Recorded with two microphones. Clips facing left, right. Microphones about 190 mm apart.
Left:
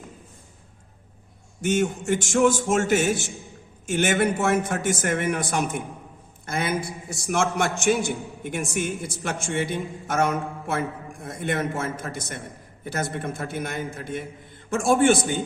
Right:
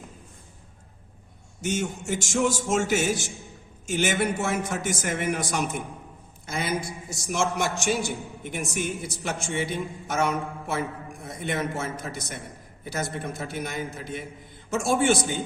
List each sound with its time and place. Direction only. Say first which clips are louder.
1.6 s a man's voice: left 5 dB; 55° left (ahead or behind)